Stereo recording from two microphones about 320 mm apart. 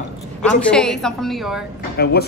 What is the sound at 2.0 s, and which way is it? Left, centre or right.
Speech, left.